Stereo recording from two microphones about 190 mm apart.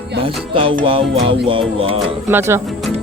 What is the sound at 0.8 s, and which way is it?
Speech, 30° right (ahead or behind).